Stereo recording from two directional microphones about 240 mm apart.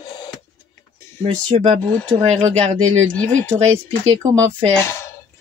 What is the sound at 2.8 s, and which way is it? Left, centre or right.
Speech, centre.